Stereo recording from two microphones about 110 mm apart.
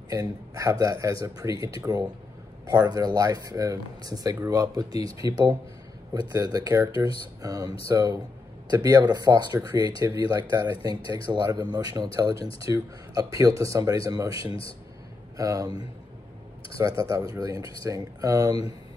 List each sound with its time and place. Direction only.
0.1 s speech: 30° right (ahead or behind)
16.7 s speech: 35° right (ahead or behind)